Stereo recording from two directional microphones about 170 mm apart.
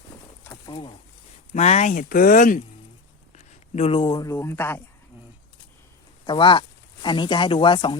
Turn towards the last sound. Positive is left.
turn(degrees=30)  # may be behind; listen again after turning